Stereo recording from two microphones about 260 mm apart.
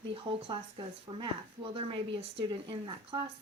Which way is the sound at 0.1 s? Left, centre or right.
Centre.